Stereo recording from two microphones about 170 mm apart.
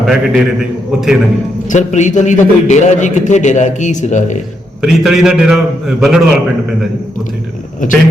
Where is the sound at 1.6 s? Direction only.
45° left (ahead or behind).